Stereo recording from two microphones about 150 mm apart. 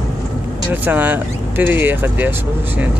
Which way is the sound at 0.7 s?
10° right (ahead or behind).